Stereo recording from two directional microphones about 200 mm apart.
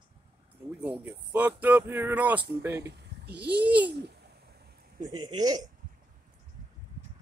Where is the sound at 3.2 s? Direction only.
55° right (ahead or behind).